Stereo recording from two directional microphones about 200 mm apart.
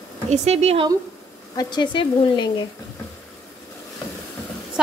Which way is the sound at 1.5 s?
20° left (ahead or behind).